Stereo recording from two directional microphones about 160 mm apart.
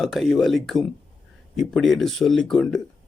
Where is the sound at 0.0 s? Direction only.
Centre (ahead or behind).